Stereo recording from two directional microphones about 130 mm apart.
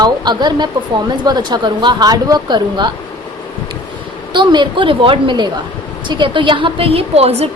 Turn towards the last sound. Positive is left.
turn(degrees=-50)  # may be behind; listen again after turning